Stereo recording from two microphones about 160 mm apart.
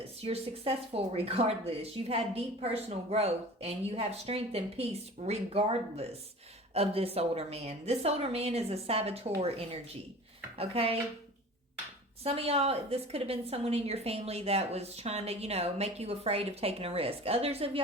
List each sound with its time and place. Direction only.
0.2 s speech: 40° right (ahead or behind)
12.2 s speech: 35° right (ahead or behind)